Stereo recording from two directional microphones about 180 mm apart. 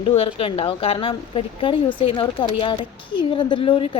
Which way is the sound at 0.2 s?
30° left (ahead or behind).